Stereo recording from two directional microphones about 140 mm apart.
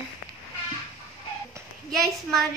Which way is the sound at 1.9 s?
Centre (ahead or behind).